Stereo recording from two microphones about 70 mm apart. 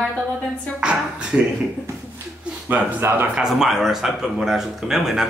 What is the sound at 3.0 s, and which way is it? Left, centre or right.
Speech, right.